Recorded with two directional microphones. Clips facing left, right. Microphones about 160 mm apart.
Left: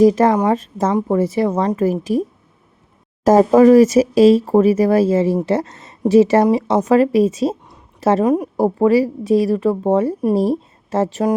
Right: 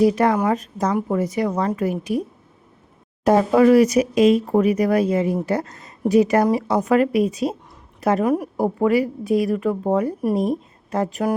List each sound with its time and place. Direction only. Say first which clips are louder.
0.0 s speech: left 5 dB; 40° left (ahead or behind)
0.3 s a woman's voice: left 4 dB; 30° left (ahead or behind)
3.2 s a woman's voice: left 5 dB; 40° left (ahead or behind)